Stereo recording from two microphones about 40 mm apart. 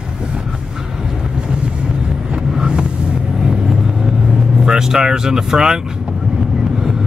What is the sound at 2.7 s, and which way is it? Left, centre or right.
Vehicle, right.